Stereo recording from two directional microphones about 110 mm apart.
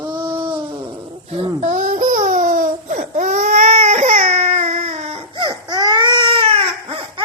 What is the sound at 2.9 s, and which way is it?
Baby cry, 90° right.